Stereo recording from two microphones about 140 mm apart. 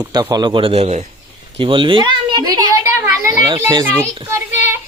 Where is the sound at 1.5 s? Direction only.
40° right (ahead or behind).